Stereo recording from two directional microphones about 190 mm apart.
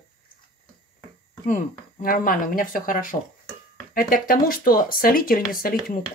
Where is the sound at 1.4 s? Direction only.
45° left (ahead or behind).